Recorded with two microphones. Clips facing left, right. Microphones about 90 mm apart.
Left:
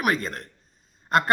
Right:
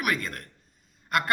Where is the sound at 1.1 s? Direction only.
30° left (ahead or behind).